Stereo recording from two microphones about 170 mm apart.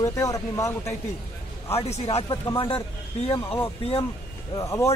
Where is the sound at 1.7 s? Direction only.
35° left (ahead or behind).